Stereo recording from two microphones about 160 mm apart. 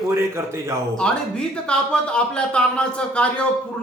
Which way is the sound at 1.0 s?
5° left (ahead or behind).